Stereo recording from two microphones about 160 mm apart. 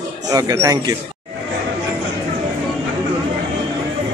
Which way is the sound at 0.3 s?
20° right (ahead or behind).